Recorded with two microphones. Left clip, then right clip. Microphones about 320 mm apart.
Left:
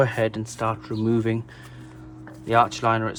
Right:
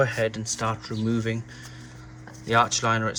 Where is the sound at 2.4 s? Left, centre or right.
Centre.